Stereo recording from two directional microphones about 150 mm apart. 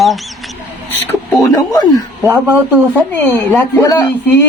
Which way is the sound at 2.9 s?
10° left (ahead or behind).